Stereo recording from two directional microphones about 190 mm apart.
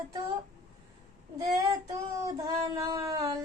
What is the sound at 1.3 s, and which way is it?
Child singing, 20° right (ahead or behind).